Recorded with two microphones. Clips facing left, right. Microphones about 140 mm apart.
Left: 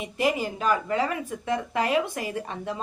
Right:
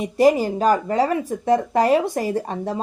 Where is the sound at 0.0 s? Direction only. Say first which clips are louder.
Right 9 dB; 40° right (ahead or behind).